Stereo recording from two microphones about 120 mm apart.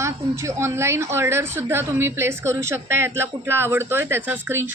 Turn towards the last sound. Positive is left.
turn(degrees=-15)  # may be behind; listen again after turning